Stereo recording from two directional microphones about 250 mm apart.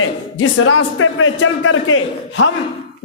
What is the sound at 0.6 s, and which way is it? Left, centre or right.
A man's voice, left.